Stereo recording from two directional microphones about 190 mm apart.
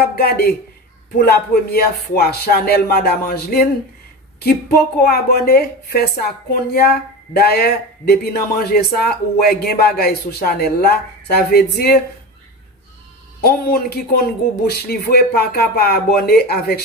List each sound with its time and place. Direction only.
0.0 s a woman's voice: 55° left (ahead or behind)
13.4 s speech: 55° left (ahead or behind)